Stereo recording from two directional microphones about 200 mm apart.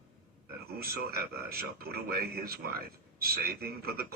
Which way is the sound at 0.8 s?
50° right (ahead or behind).